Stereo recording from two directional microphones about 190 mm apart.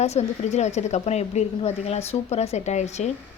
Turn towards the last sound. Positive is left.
turn(degrees=35)  # may be behind; listen again after turning